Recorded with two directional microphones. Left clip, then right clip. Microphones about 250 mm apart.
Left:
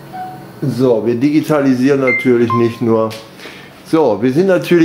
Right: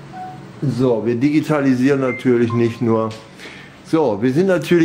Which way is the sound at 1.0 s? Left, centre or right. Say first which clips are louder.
Left 4 dB; centre.